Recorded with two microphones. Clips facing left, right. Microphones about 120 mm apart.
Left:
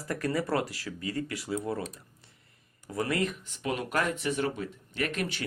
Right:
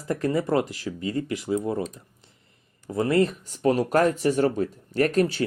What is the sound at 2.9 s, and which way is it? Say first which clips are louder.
Speech: right 8 dB; 25° right (ahead or behind).